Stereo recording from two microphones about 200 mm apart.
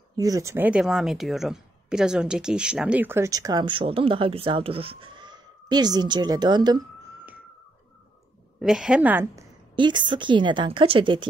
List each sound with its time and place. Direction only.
0.1 s speech: 15° right (ahead or behind)
8.5 s speech: centre (ahead or behind); by 11.2 s 25° right (ahead or behind)